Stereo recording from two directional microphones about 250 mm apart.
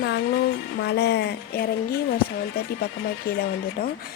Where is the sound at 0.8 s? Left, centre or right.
Left.